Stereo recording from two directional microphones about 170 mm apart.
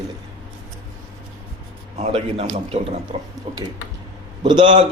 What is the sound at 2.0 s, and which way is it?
A man's voice, 35° right (ahead or behind).